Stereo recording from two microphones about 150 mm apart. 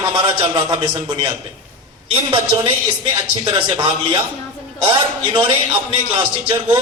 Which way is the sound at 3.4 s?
35° right (ahead or behind).